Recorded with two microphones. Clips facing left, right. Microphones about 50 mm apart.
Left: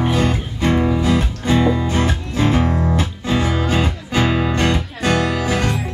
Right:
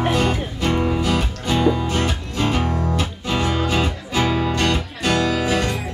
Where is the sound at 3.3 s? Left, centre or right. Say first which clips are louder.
Left 2 dB; left.